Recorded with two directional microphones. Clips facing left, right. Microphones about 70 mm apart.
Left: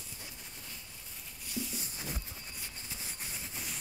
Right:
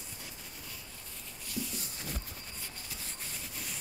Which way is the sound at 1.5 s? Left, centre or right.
Centre.